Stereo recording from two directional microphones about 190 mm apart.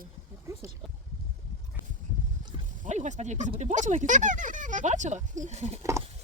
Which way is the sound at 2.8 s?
40° right (ahead or behind).